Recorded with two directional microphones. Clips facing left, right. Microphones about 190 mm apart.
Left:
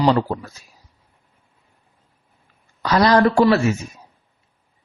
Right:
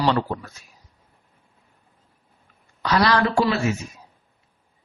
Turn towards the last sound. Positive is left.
turn(degrees=40)  # may be behind; listen again after turning